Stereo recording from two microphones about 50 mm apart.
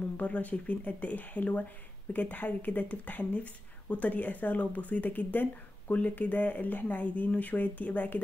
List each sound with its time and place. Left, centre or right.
0.2 s speech: left